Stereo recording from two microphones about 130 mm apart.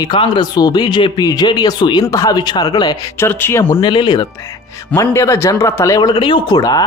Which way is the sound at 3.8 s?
35° left (ahead or behind).